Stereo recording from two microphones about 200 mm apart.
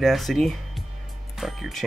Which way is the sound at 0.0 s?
Centre (ahead or behind).